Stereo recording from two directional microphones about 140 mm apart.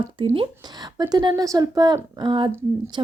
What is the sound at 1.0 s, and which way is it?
A woman's voice, 30° right (ahead or behind).